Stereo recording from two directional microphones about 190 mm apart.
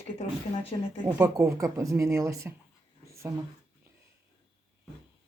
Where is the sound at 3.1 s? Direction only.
15° right (ahead or behind).